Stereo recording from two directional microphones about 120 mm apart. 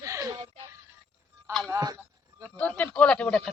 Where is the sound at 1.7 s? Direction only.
35° right (ahead or behind).